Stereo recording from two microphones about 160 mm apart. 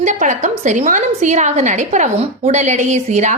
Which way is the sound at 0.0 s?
50° right (ahead or behind).